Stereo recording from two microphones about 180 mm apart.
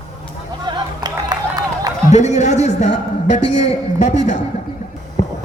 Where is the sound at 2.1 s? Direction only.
40° left (ahead or behind).